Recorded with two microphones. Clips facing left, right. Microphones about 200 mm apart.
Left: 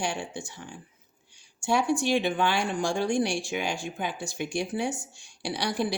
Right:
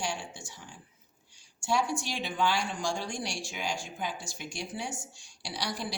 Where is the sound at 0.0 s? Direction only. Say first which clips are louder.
Left 5 dB; 60° left (ahead or behind).